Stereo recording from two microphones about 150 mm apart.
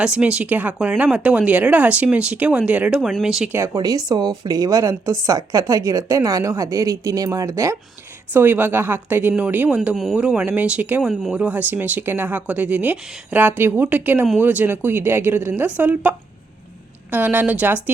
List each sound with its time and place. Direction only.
0.0 s speech: 5° right (ahead or behind)
3.5 s a woman's voice: 20° right (ahead or behind)